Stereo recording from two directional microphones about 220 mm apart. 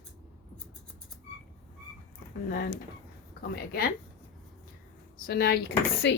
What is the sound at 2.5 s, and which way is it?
Speech, 45° left (ahead or behind).